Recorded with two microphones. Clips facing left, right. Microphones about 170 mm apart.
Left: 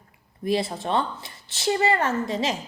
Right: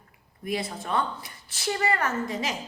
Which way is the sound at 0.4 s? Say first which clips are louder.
Left 6 dB; 30° left (ahead or behind).